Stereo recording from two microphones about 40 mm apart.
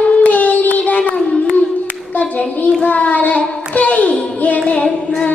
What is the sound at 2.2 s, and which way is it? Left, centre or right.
Clapping, left.